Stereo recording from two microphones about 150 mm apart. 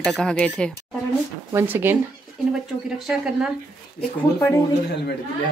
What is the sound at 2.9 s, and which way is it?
Speech, 5° right (ahead or behind).